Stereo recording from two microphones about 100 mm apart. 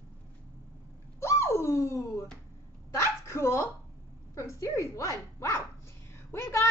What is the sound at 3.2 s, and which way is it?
Dog, 25° left (ahead or behind).